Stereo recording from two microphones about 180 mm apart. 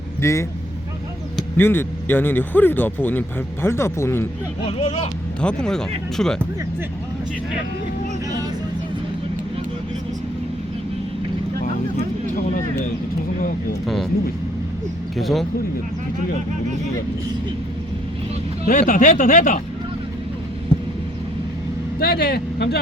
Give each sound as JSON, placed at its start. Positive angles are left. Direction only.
{"t": 0.2, "sound": "speech", "side_deg": 15}
{"t": 4.6, "sound": "speech", "side_deg": 35}
{"t": 5.4, "sound": "speech", "side_deg": 5}
{"t": 13.8, "sound": "speech", "side_deg": 0}
{"t": 15.1, "sound": "speech", "side_deg": 0}
{"t": 18.6, "sound": "speech", "side_deg": 45}
{"t": 22.0, "sound": "speech", "side_deg": 60}